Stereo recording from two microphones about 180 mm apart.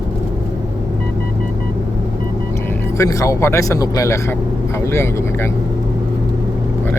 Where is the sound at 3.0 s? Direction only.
15° left (ahead or behind).